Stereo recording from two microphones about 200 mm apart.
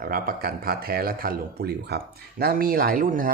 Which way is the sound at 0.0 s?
45° right (ahead or behind).